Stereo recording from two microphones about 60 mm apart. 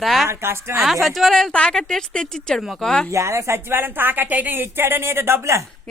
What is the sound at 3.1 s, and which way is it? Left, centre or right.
A woman's voice, right.